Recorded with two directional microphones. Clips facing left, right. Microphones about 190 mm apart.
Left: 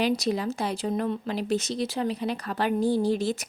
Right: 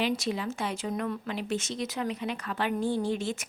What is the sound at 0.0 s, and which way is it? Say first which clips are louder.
Speech: left 4 dB; 40° left (ahead or behind).